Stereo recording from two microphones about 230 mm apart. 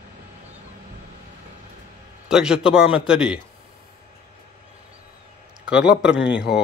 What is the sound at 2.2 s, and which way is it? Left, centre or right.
Speech, centre.